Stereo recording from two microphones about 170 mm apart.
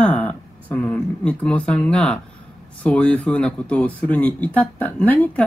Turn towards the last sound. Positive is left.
turn(degrees=10)  # may be behind; listen again after turning